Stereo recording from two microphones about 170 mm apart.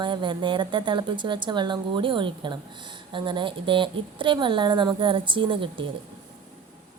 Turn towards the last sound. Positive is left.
turn(degrees=-30)  # may be behind; listen again after turning